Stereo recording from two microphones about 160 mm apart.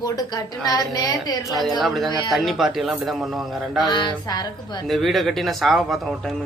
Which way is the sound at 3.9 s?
30° left (ahead or behind).